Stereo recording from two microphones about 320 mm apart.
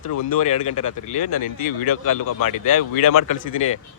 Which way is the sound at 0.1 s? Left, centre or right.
Left.